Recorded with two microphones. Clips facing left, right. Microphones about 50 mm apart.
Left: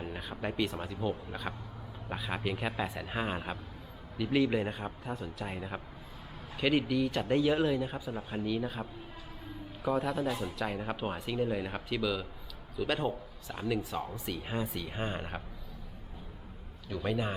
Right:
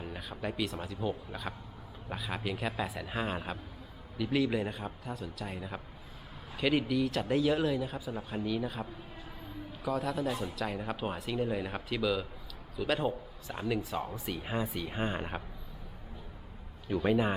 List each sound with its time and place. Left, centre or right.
0.0 s speech: centre
5.1 s speech: left
6.6 s speech: centre
16.9 s speech: centre